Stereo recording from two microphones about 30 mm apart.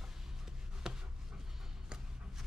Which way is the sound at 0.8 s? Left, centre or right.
Right.